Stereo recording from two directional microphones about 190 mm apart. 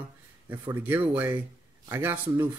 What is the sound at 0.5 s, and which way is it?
Speech, 10° right (ahead or behind).